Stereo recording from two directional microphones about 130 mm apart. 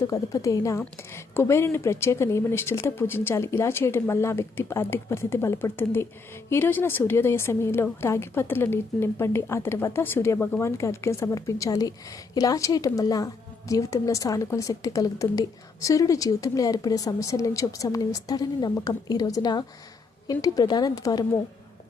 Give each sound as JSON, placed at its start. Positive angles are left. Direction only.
{"t": 0.1, "sound": "a woman's voice", "side_deg": 25}